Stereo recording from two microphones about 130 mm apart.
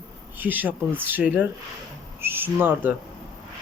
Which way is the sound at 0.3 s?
15° right (ahead or behind).